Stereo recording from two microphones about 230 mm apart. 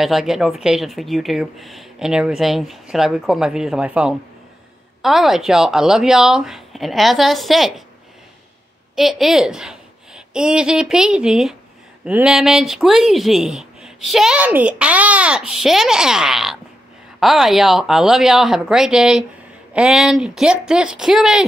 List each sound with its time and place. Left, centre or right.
0.0 s speech: centre
8.9 s a woman's voice: centre